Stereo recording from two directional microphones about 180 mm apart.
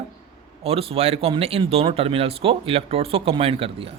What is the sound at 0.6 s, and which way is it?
A man's voice, 35° right (ahead or behind).